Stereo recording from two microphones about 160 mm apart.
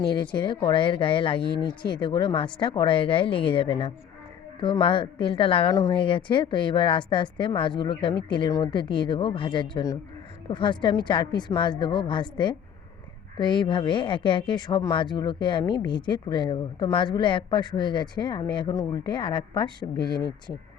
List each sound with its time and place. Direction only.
0.2 s speech: 30° left (ahead or behind)